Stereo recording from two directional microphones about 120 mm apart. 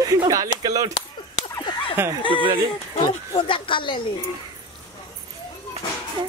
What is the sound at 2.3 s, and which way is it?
Speech, 45° right (ahead or behind).